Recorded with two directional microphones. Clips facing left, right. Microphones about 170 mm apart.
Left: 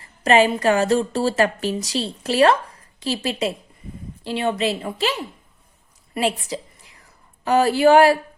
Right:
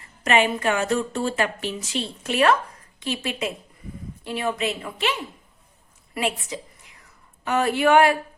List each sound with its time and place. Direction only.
0.0 s a woman's voice: 35° left (ahead or behind)